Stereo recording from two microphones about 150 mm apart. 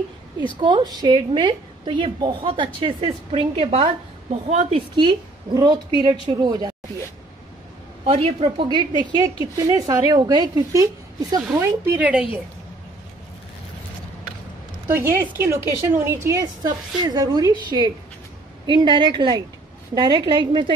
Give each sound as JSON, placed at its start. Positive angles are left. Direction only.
{"t": 0.6, "sound": "a woman's voice", "side_deg": -30}
{"t": 8.0, "sound": "a woman's voice", "side_deg": -40}
{"t": 15.0, "sound": "a woman's voice", "side_deg": -15}